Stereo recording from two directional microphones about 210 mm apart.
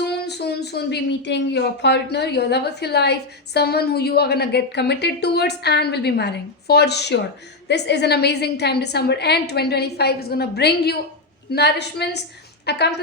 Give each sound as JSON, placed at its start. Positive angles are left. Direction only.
{"t": 0.0, "sound": "speech", "side_deg": 50}